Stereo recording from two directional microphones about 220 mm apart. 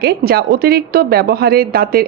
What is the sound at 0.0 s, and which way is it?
A woman's voice, 45° right (ahead or behind).